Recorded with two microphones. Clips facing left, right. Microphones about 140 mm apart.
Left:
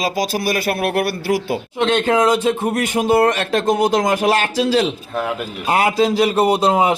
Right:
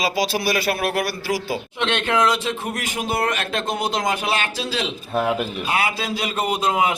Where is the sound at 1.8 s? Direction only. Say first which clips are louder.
Left 5 dB; 40° left (ahead or behind).